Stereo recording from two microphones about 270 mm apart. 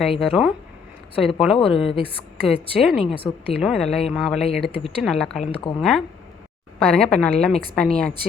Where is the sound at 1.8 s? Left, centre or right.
Left.